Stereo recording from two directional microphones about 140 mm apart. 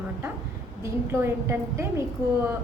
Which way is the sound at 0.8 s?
20° right (ahead or behind).